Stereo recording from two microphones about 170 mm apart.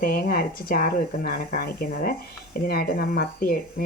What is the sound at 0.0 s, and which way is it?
Speech, 60° left (ahead or behind).